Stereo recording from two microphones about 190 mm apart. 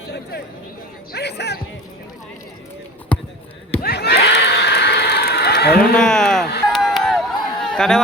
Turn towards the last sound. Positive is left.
turn(degrees=5)  # may be behind; listen again after turning